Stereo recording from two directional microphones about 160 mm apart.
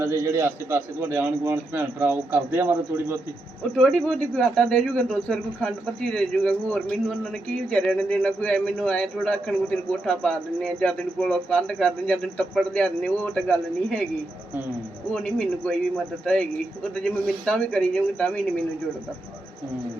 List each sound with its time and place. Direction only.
0.0 s a man's voice: 20° right (ahead or behind)
3.8 s a man's voice: 5° left (ahead or behind)
15.1 s a man's voice: 5° left (ahead or behind)